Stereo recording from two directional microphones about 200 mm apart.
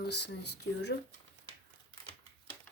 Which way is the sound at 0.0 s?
55° left (ahead or behind).